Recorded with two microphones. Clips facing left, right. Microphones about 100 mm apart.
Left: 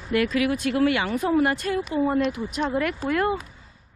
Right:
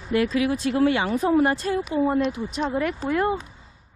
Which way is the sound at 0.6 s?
35° right (ahead or behind).